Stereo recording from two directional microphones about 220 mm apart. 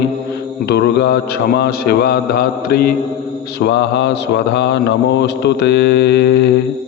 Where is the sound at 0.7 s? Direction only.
50° left (ahead or behind).